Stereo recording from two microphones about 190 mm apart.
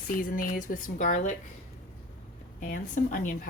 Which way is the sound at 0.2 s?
45° left (ahead or behind).